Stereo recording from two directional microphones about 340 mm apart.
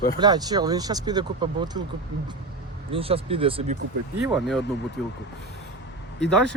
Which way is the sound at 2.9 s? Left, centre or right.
Centre.